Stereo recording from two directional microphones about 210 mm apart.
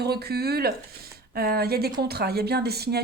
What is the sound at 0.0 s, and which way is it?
A woman's voice, 50° right (ahead or behind).